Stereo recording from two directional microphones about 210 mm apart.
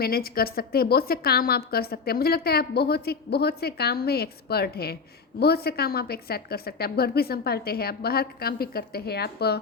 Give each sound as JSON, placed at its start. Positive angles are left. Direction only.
{"t": 0.0, "sound": "a woman's voice", "side_deg": 45}